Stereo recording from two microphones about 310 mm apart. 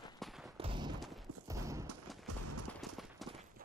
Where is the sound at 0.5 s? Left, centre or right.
Centre.